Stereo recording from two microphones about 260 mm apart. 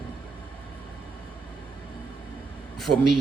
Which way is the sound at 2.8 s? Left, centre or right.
Centre.